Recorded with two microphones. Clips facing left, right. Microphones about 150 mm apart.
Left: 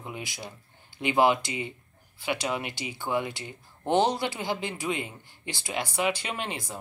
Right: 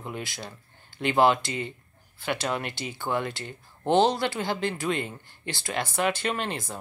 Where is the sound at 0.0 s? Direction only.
10° left (ahead or behind).